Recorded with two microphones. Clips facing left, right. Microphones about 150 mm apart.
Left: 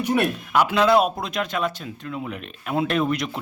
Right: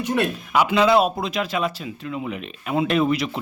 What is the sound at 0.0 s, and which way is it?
Speech, 10° left (ahead or behind).